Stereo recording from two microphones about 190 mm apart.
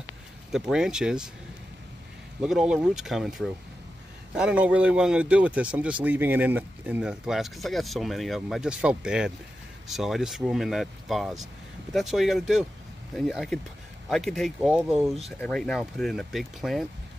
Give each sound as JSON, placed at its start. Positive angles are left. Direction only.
{"t": 0.5, "sound": "a man's voice", "side_deg": -5}
{"t": 2.4, "sound": "a man's voice", "side_deg": -5}